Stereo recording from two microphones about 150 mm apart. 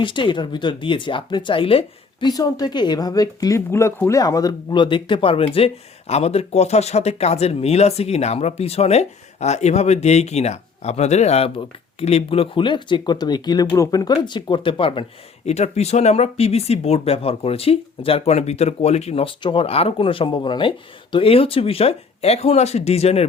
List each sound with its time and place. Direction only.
0.0 s speech: 35° left (ahead or behind)
2.2 s speech: 25° left (ahead or behind); by 23.2 s 45° left (ahead or behind)